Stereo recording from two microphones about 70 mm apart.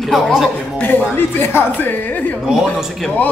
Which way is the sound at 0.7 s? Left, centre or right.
Left.